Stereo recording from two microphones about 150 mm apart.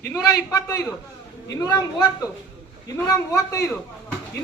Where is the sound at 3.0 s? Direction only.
20° left (ahead or behind).